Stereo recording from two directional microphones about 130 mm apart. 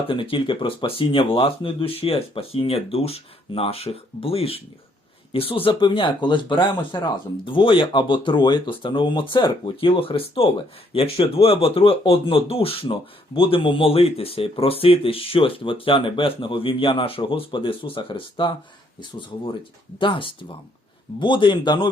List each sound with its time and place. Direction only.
0.1 s speech: 40° left (ahead or behind)
20.0 s speech: 40° left (ahead or behind)